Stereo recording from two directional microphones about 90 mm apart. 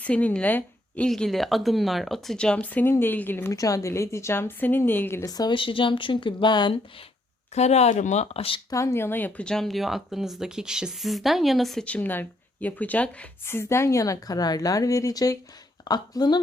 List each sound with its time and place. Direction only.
0.0 s speech: 15° left (ahead or behind)
1.0 s speech: 5° left (ahead or behind); by 3.5 s 25° left (ahead or behind)
3.5 s a woman's voice: 35° left (ahead or behind)
5.2 s speech: 45° left (ahead or behind)
5.5 s speech: 70° left (ahead or behind)
8.3 s speech: 90° left
8.7 s speech: 30° left (ahead or behind)
9.5 s speech: 5° left (ahead or behind)
11.9 s speech: 15° left (ahead or behind)
13.4 s a woman's voice: 25° left (ahead or behind); by 16.4 s 50° left (ahead or behind)